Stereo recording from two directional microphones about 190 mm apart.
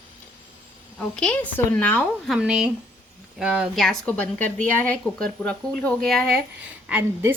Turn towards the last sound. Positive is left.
turn(degrees=-10)  # may be behind; listen again after turning